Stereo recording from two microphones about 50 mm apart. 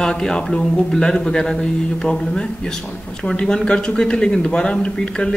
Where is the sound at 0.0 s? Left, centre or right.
Centre.